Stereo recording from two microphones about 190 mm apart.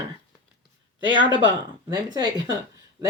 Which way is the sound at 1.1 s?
25° right (ahead or behind).